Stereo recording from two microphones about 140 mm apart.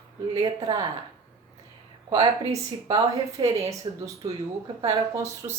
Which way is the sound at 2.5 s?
25° right (ahead or behind).